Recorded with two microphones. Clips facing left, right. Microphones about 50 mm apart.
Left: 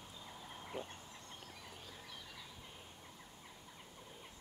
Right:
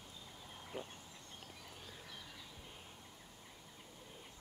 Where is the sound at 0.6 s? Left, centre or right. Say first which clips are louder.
Left 1 dB; centre.